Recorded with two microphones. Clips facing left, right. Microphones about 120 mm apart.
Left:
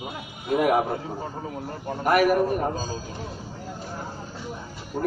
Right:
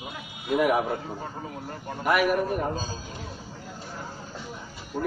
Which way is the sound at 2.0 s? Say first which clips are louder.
Left 3 dB; 45° left (ahead or behind).